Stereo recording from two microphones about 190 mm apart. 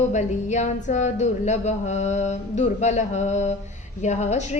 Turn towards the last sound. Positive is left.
turn(degrees=35)  # may be behind; listen again after turning